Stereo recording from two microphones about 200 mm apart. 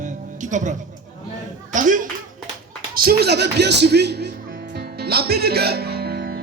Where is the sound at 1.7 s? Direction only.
40° right (ahead or behind).